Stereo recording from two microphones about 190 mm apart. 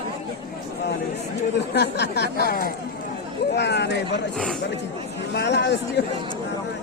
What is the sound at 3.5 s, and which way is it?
Speech, 60° left (ahead or behind).